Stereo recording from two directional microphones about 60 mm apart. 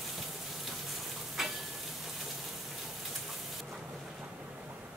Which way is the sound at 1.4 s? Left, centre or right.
Centre.